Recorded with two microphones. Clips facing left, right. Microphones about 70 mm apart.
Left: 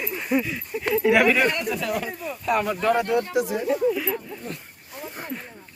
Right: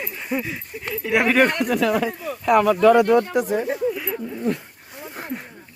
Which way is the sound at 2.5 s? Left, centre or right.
Right.